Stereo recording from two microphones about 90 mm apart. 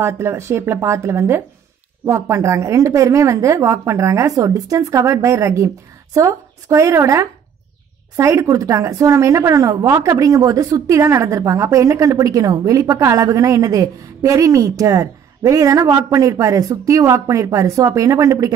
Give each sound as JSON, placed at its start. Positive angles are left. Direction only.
{"t": 0.0, "sound": "a woman's voice", "side_deg": -30}